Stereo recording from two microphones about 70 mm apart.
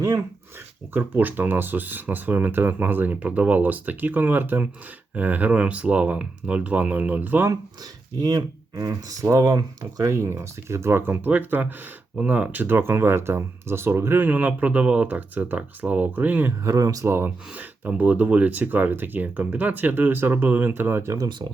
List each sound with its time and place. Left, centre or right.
0.9 s speech: right
8.2 s speech: right
8.7 s speech: right
10.2 s speech: right
11.1 s speech: right
14.3 s speech: right
16.5 s speech: right
17.1 s speech: right
17.5 s speech: right
21.2 s speech: right